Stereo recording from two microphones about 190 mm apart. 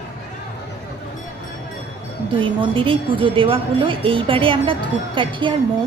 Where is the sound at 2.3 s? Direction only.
25° right (ahead or behind).